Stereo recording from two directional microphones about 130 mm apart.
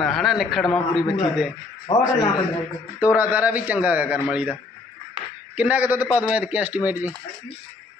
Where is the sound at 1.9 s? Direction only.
40° left (ahead or behind).